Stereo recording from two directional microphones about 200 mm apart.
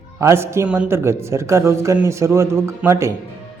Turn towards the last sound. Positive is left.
turn(degrees=-15)  # may be behind; listen again after turning